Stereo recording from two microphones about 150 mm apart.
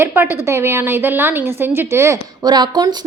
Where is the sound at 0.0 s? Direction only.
15° right (ahead or behind).